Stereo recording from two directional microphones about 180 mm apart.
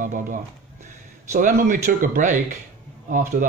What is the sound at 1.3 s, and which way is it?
Speech, 45° right (ahead or behind).